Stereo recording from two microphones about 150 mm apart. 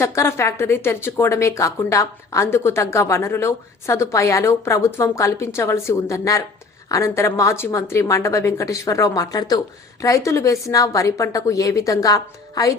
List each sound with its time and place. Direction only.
0.0 s speech: 20° left (ahead or behind)